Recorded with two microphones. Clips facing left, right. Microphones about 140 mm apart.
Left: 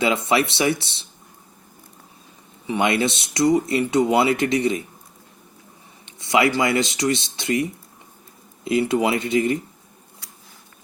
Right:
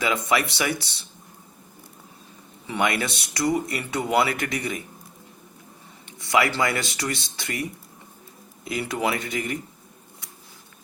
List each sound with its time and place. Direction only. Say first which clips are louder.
0.0 s speech: left 4 dB; 25° left (ahead or behind)
2.6 s speech: left 4 dB; 20° left (ahead or behind)
6.3 s speech: left 4 dB; 20° left (ahead or behind)
8.6 s speech: left 7 dB; 25° left (ahead or behind)